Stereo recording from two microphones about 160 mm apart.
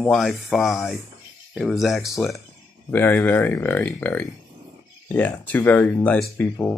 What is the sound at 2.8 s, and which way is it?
Speech, 10° left (ahead or behind).